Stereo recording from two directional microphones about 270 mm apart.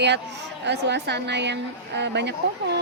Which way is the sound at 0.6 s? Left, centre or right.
Right.